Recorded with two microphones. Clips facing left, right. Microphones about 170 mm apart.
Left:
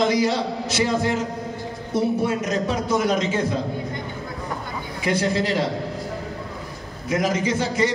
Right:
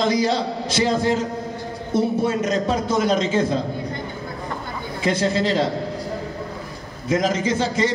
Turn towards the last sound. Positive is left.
turn(degrees=-30)  # may be behind; listen again after turning